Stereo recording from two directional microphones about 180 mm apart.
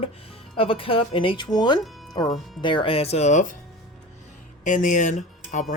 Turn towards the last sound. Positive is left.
turn(degrees=40)  # may be behind; listen again after turning